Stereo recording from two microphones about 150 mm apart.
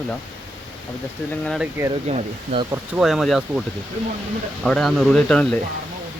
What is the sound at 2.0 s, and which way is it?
Speech, 50° right (ahead or behind).